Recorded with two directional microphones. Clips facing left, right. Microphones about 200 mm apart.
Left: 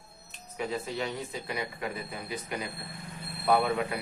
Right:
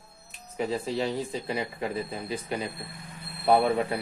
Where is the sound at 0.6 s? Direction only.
30° right (ahead or behind).